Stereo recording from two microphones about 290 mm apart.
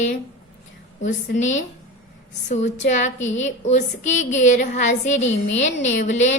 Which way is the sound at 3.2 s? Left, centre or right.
Left.